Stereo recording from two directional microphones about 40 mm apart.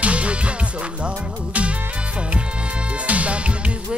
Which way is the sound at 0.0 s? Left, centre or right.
Right.